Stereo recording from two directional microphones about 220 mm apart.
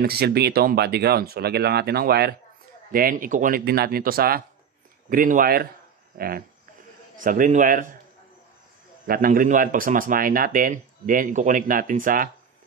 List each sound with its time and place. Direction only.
0.0 s speech: 45° right (ahead or behind)
9.0 s speech: 40° right (ahead or behind)